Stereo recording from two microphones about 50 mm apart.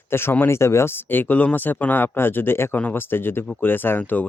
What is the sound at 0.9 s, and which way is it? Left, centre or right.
Speech, left.